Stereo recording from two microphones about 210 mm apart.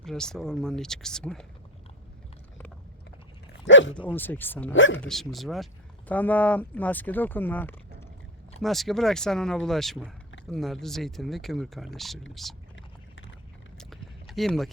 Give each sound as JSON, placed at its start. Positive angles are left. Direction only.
{"t": 0.0, "sound": "speech", "side_deg": 5}
{"t": 3.7, "sound": "speech", "side_deg": 65}
{"t": 3.9, "sound": "speech", "side_deg": 10}
{"t": 4.7, "sound": "speech", "side_deg": 65}
{"t": 5.0, "sound": "speech", "side_deg": 0}
{"t": 13.7, "sound": "a sound", "side_deg": 0}